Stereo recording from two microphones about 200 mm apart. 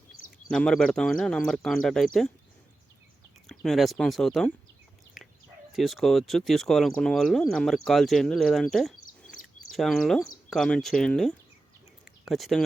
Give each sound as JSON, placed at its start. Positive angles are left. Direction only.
{"t": 0.5, "sound": "speech", "side_deg": 5}
{"t": 3.4, "sound": "speech", "side_deg": 0}
{"t": 5.7, "sound": "speech", "side_deg": 0}
{"t": 9.0, "sound": "a sound", "side_deg": 45}
{"t": 9.7, "sound": "speech", "side_deg": 0}
{"t": 12.0, "sound": "a sound", "side_deg": 0}